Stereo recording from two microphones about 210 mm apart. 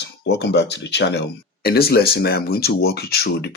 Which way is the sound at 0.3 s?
55° left (ahead or behind).